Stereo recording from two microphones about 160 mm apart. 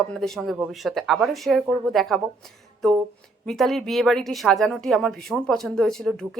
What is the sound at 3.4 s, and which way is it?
A woman's voice, centre (ahead or behind).